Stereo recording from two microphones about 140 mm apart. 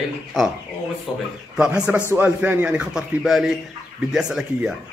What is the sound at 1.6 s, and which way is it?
A man's voice, 10° right (ahead or behind).